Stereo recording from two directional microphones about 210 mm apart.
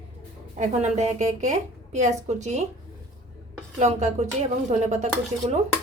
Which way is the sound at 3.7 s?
35° right (ahead or behind).